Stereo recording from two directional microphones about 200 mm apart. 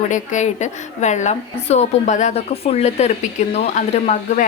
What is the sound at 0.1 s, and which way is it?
Speech, 35° left (ahead or behind).